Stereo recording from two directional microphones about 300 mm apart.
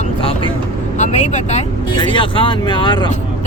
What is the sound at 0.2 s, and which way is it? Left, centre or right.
Vehicle, centre.